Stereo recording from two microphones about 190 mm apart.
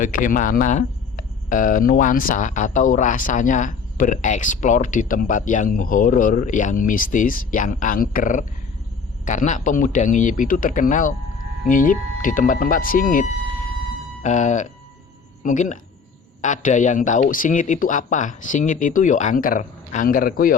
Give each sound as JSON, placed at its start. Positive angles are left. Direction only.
{"t": 0.0, "sound": "speech", "side_deg": 45}